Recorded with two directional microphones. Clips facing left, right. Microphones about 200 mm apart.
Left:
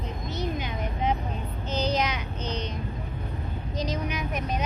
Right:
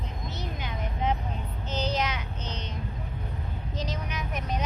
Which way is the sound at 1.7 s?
15° left (ahead or behind).